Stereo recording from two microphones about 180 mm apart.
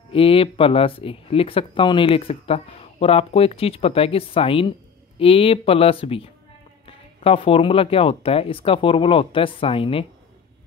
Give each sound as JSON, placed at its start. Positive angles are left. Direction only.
{"t": 0.1, "sound": "speech", "side_deg": 30}